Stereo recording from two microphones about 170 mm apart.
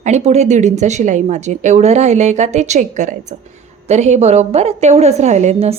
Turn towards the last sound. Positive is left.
turn(degrees=-35)  # may be behind; listen again after turning